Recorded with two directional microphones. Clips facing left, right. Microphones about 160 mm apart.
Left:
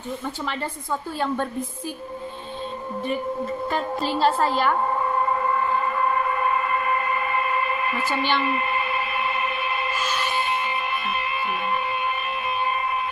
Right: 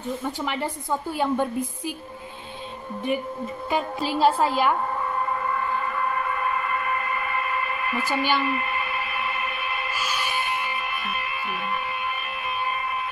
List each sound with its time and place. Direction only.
1.2 s a woman's voice: 15° right (ahead or behind)
3.7 s a woman's voice: 10° right (ahead or behind)
5.3 s siren: 30° left (ahead or behind)
8.4 s a sound: 25° left (ahead or behind)
9.9 s music: 10° right (ahead or behind)